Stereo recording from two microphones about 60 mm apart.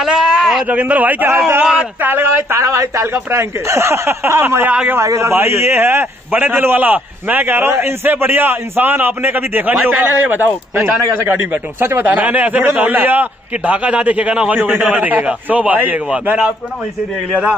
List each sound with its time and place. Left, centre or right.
0.0 s a sound: centre
0.7 s a man's voice: right
2.6 s speech: right
5.0 s a man's voice: right